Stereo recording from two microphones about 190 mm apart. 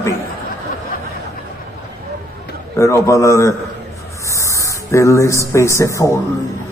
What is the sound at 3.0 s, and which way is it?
A man's voice, 15° left (ahead or behind).